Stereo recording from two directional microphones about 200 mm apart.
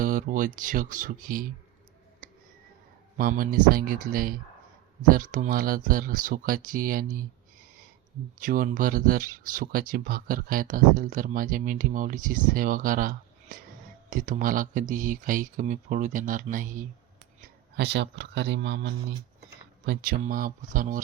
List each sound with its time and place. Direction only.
0.0 s speech: 45° right (ahead or behind)
3.2 s speech: 45° right (ahead or behind)
8.4 s speech: 45° right (ahead or behind)
17.7 s speech: 60° right (ahead or behind); by 21.0 s 40° right (ahead or behind)